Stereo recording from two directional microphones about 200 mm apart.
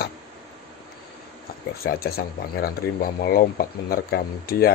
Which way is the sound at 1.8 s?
50° left (ahead or behind).